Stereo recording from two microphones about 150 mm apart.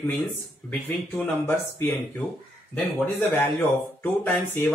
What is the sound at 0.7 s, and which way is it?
Speech, 10° left (ahead or behind).